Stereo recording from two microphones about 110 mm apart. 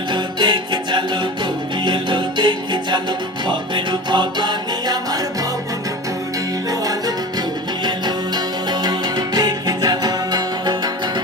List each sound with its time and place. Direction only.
0.1 s music: 45° right (ahead or behind)
6.7 s music: 35° right (ahead or behind)
8.7 s music: 40° right (ahead or behind)